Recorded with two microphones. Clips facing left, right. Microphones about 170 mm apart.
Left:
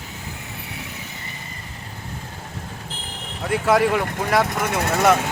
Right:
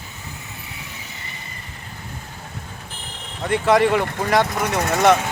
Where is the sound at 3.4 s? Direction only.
5° left (ahead or behind).